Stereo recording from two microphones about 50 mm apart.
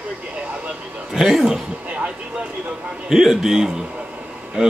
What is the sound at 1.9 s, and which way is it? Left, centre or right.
Speech, right.